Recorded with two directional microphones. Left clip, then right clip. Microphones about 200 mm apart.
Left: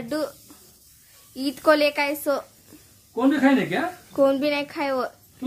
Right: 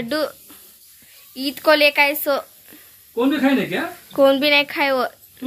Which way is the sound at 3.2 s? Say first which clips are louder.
Right 2 dB; 20° left (ahead or behind).